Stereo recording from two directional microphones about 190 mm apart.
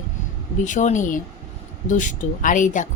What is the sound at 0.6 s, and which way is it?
Speech, 40° left (ahead or behind).